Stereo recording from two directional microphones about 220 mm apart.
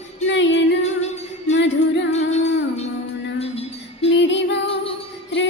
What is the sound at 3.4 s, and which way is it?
Music, 25° left (ahead or behind).